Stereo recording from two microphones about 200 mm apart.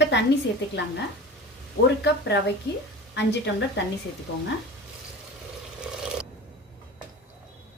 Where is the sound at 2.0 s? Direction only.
55° left (ahead or behind).